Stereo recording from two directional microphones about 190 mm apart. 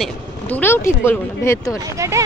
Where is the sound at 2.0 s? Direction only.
15° right (ahead or behind).